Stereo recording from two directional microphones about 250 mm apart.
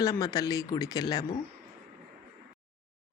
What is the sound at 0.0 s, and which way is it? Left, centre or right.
A woman's voice, centre.